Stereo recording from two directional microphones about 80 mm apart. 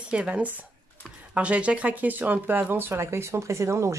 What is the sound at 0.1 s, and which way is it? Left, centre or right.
Speech, centre.